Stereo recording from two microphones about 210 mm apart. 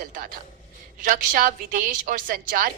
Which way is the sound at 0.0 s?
40° right (ahead or behind).